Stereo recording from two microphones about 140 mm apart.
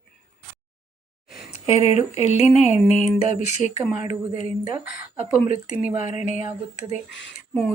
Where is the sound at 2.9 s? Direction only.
55° left (ahead or behind).